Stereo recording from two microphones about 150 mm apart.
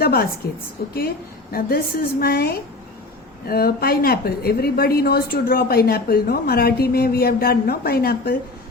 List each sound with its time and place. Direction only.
0.0 s a woman's voice: 90° left
1.5 s a woman's voice: 85° left